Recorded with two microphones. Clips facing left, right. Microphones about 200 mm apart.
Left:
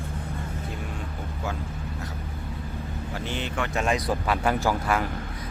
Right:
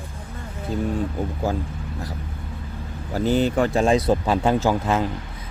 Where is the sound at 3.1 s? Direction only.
40° right (ahead or behind).